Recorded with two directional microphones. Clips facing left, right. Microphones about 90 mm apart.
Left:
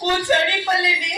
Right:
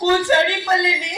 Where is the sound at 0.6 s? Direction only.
25° right (ahead or behind).